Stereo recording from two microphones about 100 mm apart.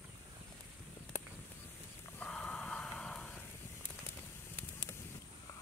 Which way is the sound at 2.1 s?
10° left (ahead or behind).